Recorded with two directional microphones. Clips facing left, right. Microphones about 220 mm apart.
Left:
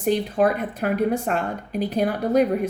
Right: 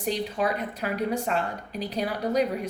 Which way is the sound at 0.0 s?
50° left (ahead or behind).